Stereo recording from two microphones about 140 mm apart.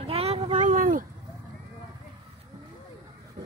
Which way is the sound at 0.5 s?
70° right (ahead or behind).